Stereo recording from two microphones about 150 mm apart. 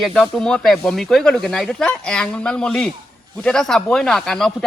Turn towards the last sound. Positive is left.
turn(degrees=5)  # may be behind; listen again after turning